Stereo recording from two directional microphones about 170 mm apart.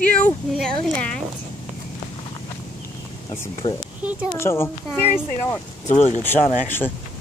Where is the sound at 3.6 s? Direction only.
35° left (ahead or behind).